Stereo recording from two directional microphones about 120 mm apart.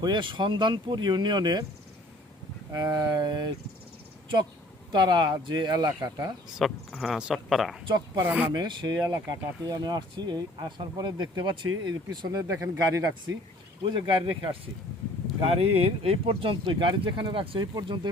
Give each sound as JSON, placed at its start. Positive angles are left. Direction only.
{"t": 0.0, "sound": "speech", "side_deg": -40}
{"t": 2.7, "sound": "speech", "side_deg": -35}
{"t": 4.9, "sound": "speech", "side_deg": -35}
{"t": 6.6, "sound": "speech", "side_deg": -5}
{"t": 7.9, "sound": "speech", "side_deg": -35}
{"t": 8.2, "sound": "speech", "side_deg": -15}
{"t": 8.5, "sound": "speech", "side_deg": -40}
{"t": 13.9, "sound": "speech", "side_deg": -40}
{"t": 15.4, "sound": "speech", "side_deg": -50}